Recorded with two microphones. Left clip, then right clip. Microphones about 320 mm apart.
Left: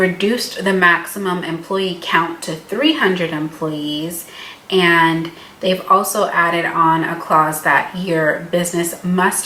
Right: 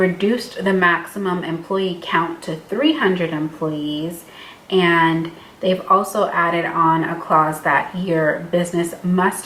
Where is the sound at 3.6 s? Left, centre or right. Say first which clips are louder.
Left 1 dB; right.